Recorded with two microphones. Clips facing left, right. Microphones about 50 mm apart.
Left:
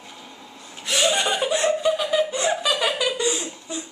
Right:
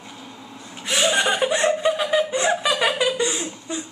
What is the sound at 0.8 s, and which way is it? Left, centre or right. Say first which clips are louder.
Chuckle: right 2 dB; centre.